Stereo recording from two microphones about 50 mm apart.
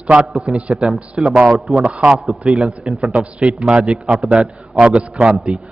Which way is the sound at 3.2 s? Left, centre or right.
Right.